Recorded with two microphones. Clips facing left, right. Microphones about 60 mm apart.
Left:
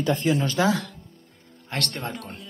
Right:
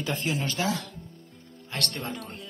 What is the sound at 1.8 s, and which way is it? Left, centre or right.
Speech, left.